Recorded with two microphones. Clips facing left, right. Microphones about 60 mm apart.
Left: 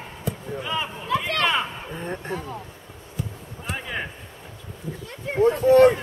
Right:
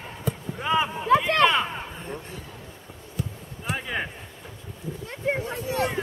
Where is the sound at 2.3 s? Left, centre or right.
Left.